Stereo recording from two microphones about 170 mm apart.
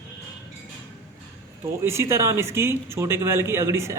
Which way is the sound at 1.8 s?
15° right (ahead or behind).